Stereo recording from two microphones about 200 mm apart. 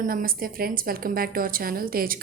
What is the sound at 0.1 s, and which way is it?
A woman's voice, 45° right (ahead or behind).